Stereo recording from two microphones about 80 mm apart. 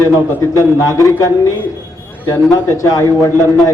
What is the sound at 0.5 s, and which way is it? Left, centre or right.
Speech, left.